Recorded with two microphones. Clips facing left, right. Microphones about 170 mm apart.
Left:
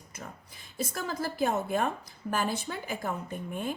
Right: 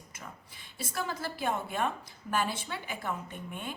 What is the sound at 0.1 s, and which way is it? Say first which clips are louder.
A woman's voice: left 4 dB; 40° left (ahead or behind).